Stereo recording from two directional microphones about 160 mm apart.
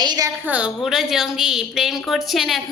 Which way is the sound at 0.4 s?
10° right (ahead or behind).